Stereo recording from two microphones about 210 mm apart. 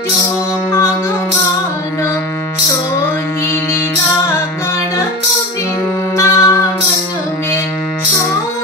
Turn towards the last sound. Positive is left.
turn(degrees=15)  # may be behind; listen again after turning